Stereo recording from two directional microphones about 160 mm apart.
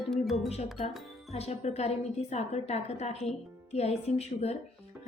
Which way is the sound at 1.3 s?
40° left (ahead or behind).